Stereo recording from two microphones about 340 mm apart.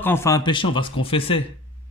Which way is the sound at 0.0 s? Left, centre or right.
Centre.